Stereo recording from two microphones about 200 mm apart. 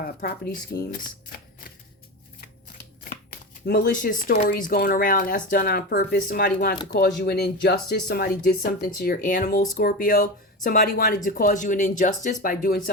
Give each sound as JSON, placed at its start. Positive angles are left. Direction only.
{"t": 0.0, "sound": "speech", "side_deg": 45}
{"t": 0.9, "sound": "a sound", "side_deg": 45}
{"t": 3.0, "sound": "speech", "side_deg": 45}